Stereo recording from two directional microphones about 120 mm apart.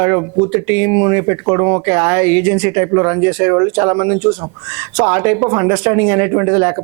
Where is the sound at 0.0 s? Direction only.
20° right (ahead or behind).